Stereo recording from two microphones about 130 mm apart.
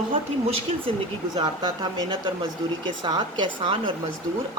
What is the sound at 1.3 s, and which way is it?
Speech, 40° right (ahead or behind).